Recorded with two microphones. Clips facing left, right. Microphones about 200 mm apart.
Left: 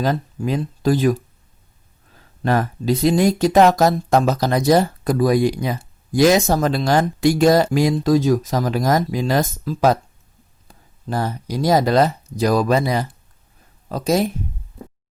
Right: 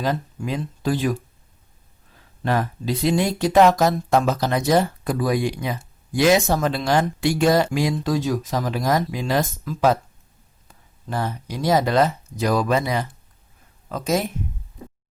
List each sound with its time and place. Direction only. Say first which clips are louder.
0.0 s speech: left 4 dB; 40° left (ahead or behind)
2.4 s speech: left 3 dB; 45° left (ahead or behind)
11.1 s speech: left 4 dB; 40° left (ahead or behind)